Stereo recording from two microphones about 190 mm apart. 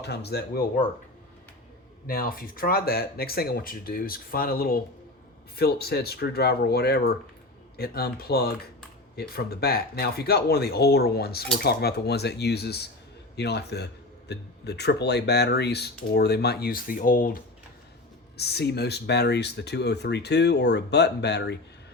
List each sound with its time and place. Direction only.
0.0 s speech: 60° left (ahead or behind)
2.0 s speech: 50° left (ahead or behind)
18.3 s speech: 60° left (ahead or behind)